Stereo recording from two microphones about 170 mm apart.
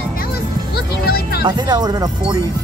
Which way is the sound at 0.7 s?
65° left (ahead or behind).